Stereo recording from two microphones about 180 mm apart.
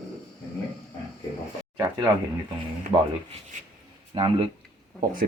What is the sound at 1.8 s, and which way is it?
Speech, 15° right (ahead or behind).